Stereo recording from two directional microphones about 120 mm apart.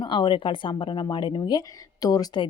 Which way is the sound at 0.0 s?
40° left (ahead or behind).